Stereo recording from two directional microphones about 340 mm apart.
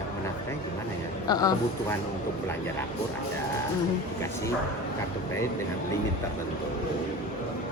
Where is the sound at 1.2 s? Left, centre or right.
Centre.